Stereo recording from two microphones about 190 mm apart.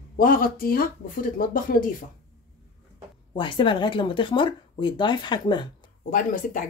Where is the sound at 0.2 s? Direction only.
50° left (ahead or behind).